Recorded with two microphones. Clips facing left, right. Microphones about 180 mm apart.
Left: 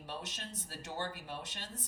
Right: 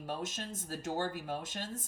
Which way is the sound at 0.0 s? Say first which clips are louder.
Right 6 dB; 45° right (ahead or behind).